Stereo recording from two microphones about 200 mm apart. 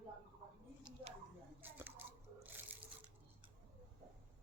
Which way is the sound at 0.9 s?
20° right (ahead or behind).